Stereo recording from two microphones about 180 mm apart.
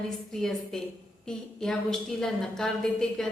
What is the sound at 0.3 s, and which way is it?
A woman's voice, centre (ahead or behind).